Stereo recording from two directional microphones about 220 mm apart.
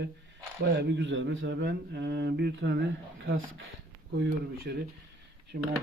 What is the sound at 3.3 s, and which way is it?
Speech, 65° right (ahead or behind).